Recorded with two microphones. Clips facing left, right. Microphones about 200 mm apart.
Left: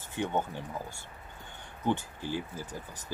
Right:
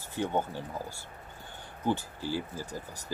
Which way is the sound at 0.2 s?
10° right (ahead or behind).